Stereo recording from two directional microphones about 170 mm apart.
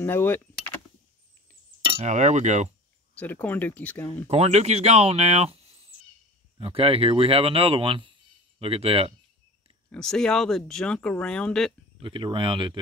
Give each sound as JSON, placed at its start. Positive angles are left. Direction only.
{"t": 0.0, "sound": "door", "side_deg": 10}
{"t": 1.8, "sound": "speech", "side_deg": -30}
{"t": 3.2, "sound": "speech", "side_deg": 10}
{"t": 4.3, "sound": "speech", "side_deg": -40}
{"t": 9.8, "sound": "speech", "side_deg": 5}
{"t": 12.0, "sound": "speech", "side_deg": -30}